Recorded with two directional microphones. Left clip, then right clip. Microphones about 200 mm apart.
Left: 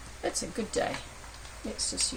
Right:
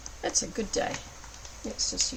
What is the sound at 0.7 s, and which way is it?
Speech, centre (ahead or behind).